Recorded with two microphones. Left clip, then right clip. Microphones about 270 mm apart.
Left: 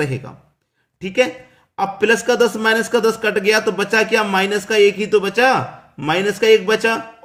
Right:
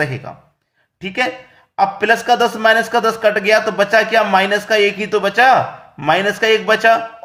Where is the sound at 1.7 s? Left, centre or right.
Centre.